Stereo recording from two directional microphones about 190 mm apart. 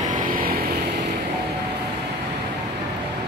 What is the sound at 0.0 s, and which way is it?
Vehicle, 45° right (ahead or behind).